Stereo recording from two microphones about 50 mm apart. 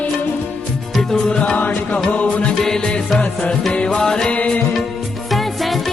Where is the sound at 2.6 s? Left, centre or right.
Centre.